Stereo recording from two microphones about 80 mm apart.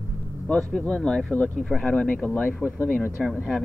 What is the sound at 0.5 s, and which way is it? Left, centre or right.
Speech, centre.